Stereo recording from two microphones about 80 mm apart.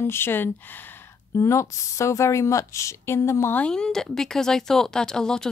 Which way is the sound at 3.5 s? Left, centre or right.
Centre.